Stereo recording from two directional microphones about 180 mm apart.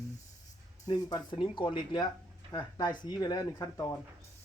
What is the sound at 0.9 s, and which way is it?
Speech, 25° left (ahead or behind).